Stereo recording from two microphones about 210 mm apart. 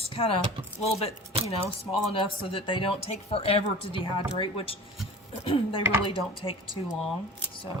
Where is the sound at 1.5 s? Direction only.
25° left (ahead or behind).